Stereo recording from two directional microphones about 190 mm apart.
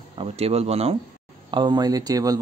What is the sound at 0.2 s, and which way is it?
Speech, 30° right (ahead or behind).